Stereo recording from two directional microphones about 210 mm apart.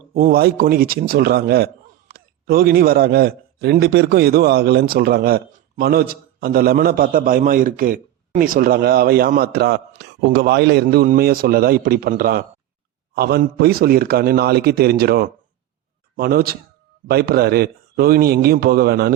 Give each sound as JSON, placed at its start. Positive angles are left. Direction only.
{"t": 0.1, "sound": "a man's voice", "side_deg": -45}